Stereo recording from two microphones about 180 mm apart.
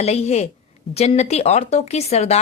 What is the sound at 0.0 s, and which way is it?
A woman's voice, 35° left (ahead or behind).